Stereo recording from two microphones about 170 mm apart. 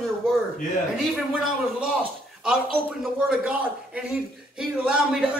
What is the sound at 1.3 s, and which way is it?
A man's voice, 5° right (ahead or behind).